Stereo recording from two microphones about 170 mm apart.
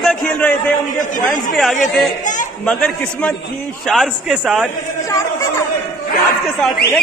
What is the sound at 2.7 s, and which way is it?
A man's voice, 5° left (ahead or behind).